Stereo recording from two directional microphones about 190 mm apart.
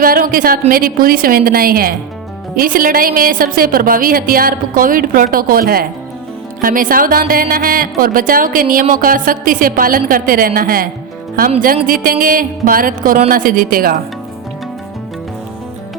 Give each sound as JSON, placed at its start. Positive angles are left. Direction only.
{"t": 0.0, "sound": "speech", "side_deg": -50}
{"t": 12.0, "sound": "speech", "side_deg": -50}